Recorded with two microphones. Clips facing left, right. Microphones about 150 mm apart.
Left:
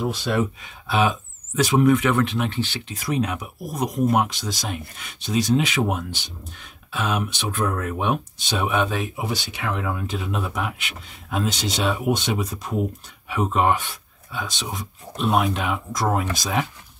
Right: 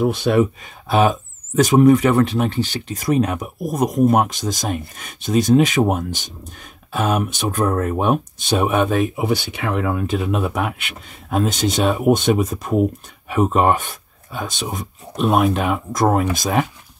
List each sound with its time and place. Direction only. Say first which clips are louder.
0.0 s speech: right 7 dB; 50° right (ahead or behind)